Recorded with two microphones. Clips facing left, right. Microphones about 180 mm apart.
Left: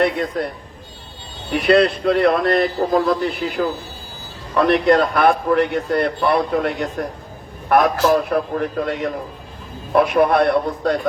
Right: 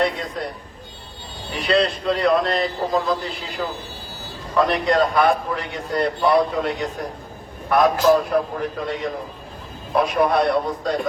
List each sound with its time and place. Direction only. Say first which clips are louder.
0.0 s a man's voice: left 4 dB; 55° left (ahead or behind)
1.5 s a man's voice: left 5 dB; 60° left (ahead or behind)
8.1 s a man's voice: left 1 dB; 55° left (ahead or behind)